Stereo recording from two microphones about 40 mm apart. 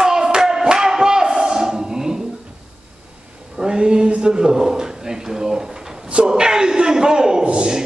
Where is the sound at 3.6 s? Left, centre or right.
Centre.